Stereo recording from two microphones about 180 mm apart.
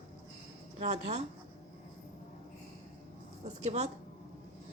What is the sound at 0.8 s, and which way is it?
Speech, 40° right (ahead or behind).